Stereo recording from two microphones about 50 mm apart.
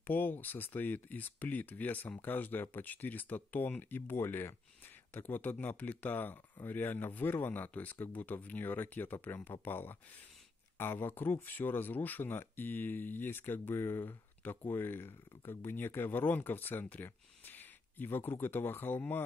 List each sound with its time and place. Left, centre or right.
0.0 s speech: left
14.4 s speech: left